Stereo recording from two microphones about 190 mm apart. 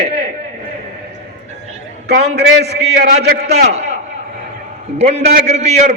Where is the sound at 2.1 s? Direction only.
60° right (ahead or behind).